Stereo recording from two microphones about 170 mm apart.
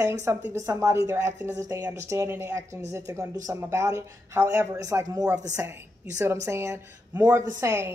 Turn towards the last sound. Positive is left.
turn(degrees=-15)  # may be behind; listen again after turning